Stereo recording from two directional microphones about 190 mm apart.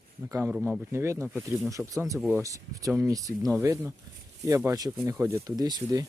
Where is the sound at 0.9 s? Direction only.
15° right (ahead or behind).